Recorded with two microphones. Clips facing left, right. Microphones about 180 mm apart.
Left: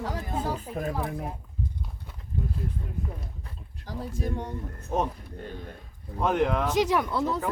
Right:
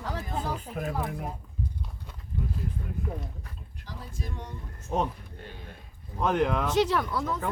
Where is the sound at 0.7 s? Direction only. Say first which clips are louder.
Left 2 dB; 10° left (ahead or behind).